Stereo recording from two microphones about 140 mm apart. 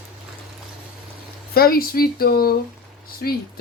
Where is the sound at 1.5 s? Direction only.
90° left.